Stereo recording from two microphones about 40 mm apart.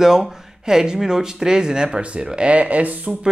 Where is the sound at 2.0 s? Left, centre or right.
Right.